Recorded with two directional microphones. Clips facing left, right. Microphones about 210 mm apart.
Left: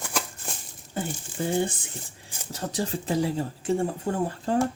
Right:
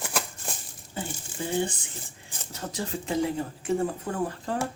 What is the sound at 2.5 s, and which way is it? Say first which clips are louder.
Speech: left 4 dB; 35° left (ahead or behind).